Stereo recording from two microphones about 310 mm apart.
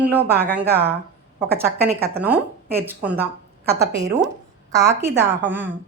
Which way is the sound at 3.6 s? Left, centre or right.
Right.